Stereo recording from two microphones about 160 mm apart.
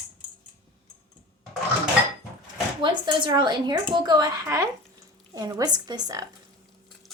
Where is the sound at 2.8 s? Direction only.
30° right (ahead or behind).